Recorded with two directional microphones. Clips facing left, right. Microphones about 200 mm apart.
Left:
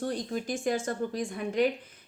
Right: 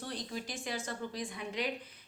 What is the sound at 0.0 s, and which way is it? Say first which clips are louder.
A woman's voice: left 9 dB; 45° left (ahead or behind).